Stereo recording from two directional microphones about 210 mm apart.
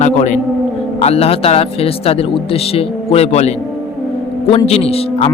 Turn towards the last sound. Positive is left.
turn(degrees=30)  # may be behind; listen again after turning